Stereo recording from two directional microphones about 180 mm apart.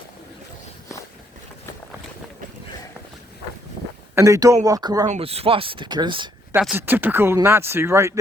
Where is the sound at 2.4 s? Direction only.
50° right (ahead or behind).